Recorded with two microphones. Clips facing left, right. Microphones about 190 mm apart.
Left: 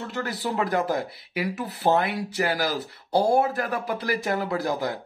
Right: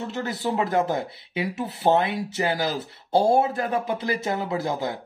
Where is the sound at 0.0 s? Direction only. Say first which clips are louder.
Right 2 dB; 20° right (ahead or behind).